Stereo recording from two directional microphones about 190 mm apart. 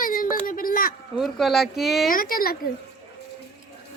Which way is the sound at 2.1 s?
50° left (ahead or behind).